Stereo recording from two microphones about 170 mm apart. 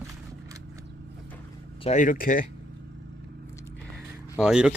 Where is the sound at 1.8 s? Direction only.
50° left (ahead or behind).